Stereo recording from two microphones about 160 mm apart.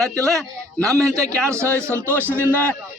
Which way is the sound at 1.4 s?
15° right (ahead or behind).